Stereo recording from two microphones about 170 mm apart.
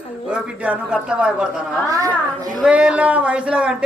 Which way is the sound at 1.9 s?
20° right (ahead or behind).